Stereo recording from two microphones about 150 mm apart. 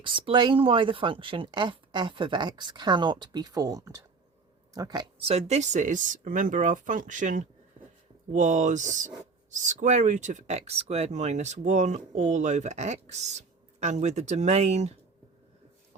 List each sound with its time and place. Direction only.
0.0 s speech: 35° right (ahead or behind)
5.2 s speech: 45° right (ahead or behind)